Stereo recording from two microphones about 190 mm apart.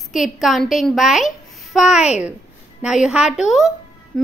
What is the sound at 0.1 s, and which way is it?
A woman's voice, centre (ahead or behind).